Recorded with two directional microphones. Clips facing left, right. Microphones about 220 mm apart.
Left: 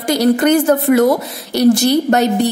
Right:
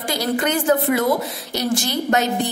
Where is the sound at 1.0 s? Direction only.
65° left (ahead or behind).